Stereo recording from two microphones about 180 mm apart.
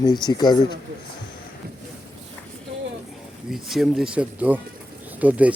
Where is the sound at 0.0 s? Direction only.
25° left (ahead or behind).